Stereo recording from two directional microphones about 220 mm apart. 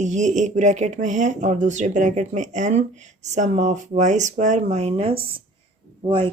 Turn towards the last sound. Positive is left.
turn(degrees=-20)  # may be behind; listen again after turning